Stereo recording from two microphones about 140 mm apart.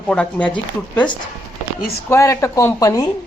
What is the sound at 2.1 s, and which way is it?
Speech, 20° left (ahead or behind).